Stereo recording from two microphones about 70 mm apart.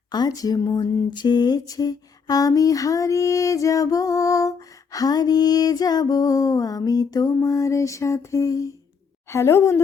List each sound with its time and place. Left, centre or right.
0.1 s speech: left
7.4 s a sound: left
9.3 s a woman's voice: left